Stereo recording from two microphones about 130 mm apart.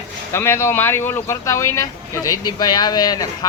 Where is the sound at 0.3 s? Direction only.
20° left (ahead or behind).